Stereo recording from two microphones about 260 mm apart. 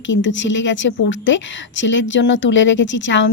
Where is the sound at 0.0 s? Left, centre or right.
Left.